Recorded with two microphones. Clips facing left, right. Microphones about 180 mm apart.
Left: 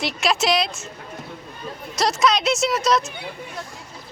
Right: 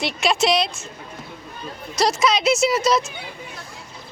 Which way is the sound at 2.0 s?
Centre (ahead or behind).